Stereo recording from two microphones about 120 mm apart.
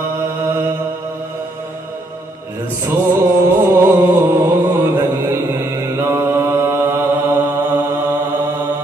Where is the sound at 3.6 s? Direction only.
20° right (ahead or behind).